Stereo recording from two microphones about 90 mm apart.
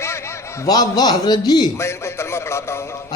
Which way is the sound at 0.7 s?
45° left (ahead or behind).